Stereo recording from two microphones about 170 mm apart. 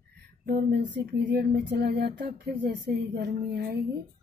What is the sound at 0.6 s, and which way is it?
Speech, 90° right.